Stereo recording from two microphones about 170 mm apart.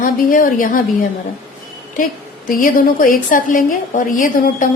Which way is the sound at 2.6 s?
55° left (ahead or behind).